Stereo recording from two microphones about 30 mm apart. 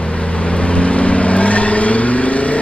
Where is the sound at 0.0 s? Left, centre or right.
Left.